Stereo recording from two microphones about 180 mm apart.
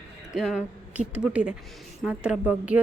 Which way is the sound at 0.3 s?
5° right (ahead or behind).